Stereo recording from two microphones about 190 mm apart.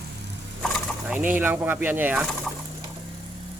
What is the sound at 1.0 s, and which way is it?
A man's voice, 10° right (ahead or behind).